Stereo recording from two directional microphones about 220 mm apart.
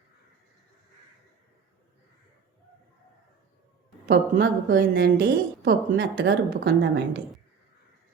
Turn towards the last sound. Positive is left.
turn(degrees=-50)  # may be behind; listen again after turning